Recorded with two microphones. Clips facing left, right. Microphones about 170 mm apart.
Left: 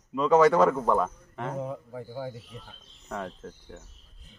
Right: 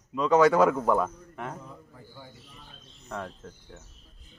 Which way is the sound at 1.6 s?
75° left (ahead or behind).